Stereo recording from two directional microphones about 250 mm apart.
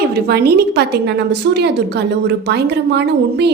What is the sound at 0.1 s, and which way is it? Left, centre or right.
A woman's voice, right.